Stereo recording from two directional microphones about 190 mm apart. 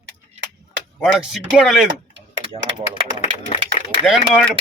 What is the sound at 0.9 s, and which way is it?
Speech, centre (ahead or behind).